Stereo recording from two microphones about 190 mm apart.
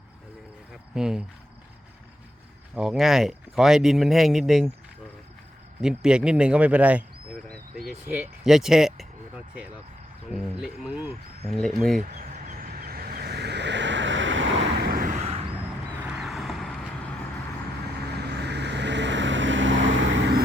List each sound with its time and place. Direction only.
0.7 s cricket: 5° right (ahead or behind)
2.7 s speech: 5° right (ahead or behind)
5.8 s speech: 5° right (ahead or behind)
7.4 s speech: 5° left (ahead or behind)
11.9 s vehicle: 45° right (ahead or behind)
16.0 s vehicle: 5° right (ahead or behind)
18.1 s vehicle: 60° right (ahead or behind)